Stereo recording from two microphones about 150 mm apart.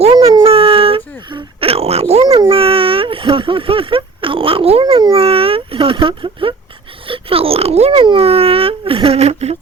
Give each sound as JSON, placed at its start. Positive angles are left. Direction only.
{"t": 0.0, "sound": "dog", "side_deg": -40}
{"t": 2.5, "sound": "speech", "side_deg": -40}